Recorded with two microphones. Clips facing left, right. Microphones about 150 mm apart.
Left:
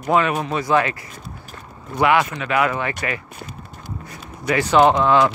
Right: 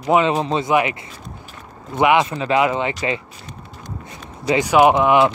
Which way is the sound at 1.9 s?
20° right (ahead or behind).